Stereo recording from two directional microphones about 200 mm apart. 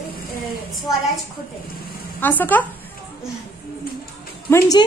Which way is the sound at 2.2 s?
10° left (ahead or behind).